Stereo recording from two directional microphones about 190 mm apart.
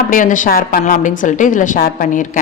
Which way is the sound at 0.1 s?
45° left (ahead or behind).